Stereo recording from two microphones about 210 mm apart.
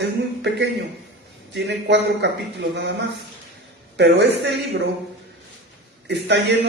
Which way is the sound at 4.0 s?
55° right (ahead or behind).